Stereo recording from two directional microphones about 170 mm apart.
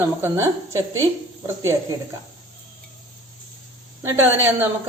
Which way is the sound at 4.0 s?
15° right (ahead or behind).